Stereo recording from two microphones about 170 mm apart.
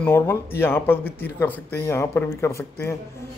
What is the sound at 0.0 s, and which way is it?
A man's voice, 10° left (ahead or behind).